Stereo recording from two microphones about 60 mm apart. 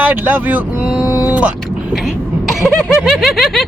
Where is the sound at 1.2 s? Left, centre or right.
Right.